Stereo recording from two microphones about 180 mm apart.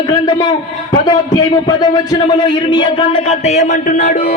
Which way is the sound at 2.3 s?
25° left (ahead or behind).